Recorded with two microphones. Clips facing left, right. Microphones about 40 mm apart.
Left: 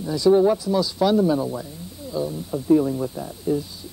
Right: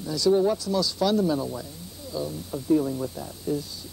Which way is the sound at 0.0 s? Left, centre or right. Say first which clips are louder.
Left 5 dB; left.